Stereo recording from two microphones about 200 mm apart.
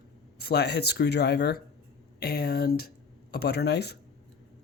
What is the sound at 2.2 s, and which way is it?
Speech, 50° left (ahead or behind).